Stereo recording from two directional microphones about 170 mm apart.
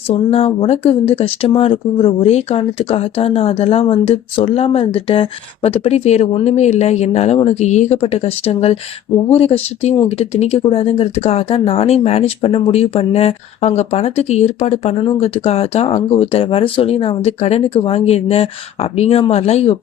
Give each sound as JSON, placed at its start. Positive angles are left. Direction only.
{"t": 0.1, "sound": "speech", "side_deg": 35}